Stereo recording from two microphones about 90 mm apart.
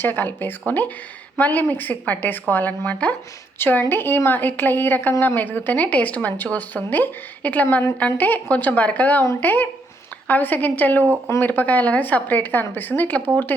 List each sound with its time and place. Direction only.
0.0 s a woman's voice: 20° left (ahead or behind)